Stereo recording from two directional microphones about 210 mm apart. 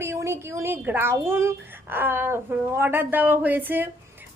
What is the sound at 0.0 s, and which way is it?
Speech, 10° right (ahead or behind).